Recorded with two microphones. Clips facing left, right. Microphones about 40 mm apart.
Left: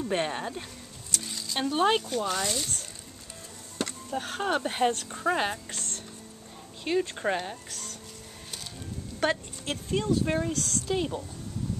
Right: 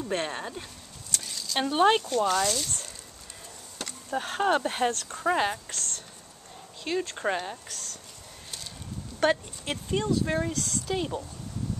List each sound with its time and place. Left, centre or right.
0.0 s speech: centre
1.2 s a sound: centre
1.6 s speech: centre
2.0 s speech: centre
2.6 s speech: centre
4.1 s speech: centre
5.2 s speech: centre
5.7 s a sound: centre
6.8 s speech: centre
9.2 s speech: centre